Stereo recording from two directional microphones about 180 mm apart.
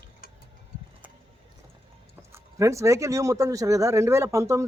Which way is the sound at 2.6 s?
15° right (ahead or behind).